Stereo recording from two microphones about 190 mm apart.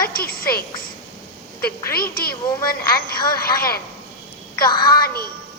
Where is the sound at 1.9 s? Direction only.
50° left (ahead or behind).